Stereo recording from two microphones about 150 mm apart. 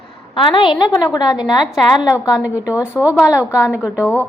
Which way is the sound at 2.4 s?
10° right (ahead or behind).